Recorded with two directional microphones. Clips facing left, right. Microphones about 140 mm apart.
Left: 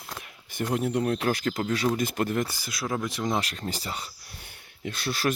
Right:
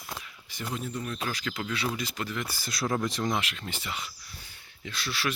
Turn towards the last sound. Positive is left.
turn(degrees=45)  # may be behind; listen again after turning